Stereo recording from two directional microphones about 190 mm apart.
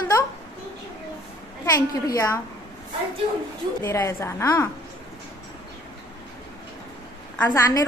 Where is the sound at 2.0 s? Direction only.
15° left (ahead or behind).